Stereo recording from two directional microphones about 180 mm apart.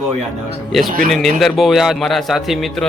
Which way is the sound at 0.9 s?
50° right (ahead or behind).